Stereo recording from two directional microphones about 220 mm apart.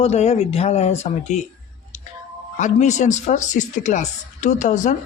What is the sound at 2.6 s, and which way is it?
A woman's voice, 35° left (ahead or behind).